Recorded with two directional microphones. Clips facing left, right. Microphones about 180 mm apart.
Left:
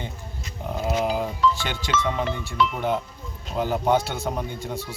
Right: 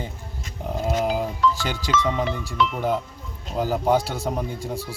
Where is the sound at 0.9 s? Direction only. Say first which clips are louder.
Right 1 dB; centre (ahead or behind).